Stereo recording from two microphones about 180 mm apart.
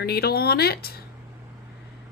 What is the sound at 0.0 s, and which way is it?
Speech, 60° left (ahead or behind).